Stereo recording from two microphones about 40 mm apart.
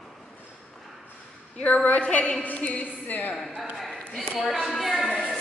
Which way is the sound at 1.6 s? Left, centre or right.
Left.